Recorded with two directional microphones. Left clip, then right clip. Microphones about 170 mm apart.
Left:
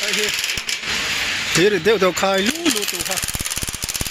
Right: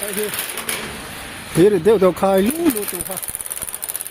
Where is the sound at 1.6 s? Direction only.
20° right (ahead or behind).